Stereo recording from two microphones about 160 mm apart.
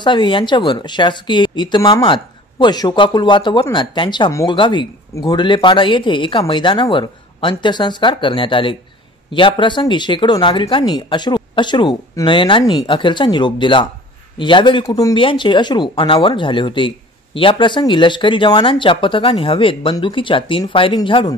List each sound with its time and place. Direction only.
0.0 s speech: 30° left (ahead or behind)
4.3 s speech: 20° left (ahead or behind)
4.6 s speech: 30° left (ahead or behind)